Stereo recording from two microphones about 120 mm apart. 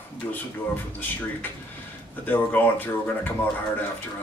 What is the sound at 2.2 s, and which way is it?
Speech, 15° left (ahead or behind).